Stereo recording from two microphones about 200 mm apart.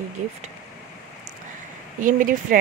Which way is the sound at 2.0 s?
40° right (ahead or behind).